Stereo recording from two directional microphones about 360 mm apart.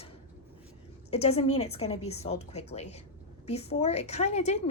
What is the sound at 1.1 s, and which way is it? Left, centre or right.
A woman's voice, centre.